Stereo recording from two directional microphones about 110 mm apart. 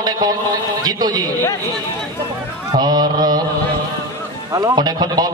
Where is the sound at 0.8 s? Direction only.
40° right (ahead or behind).